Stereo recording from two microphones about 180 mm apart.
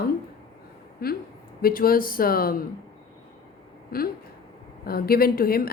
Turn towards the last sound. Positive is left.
turn(degrees=55)  # may be behind; listen again after turning